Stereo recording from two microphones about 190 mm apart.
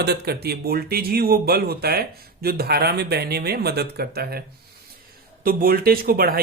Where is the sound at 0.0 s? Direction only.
60° right (ahead or behind).